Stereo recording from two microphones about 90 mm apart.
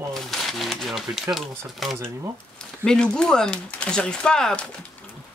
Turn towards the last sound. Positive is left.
turn(degrees=10)  # may be behind; listen again after turning